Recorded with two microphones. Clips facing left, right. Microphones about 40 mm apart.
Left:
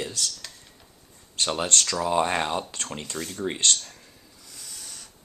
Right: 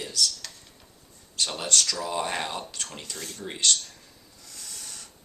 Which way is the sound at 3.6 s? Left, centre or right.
Left.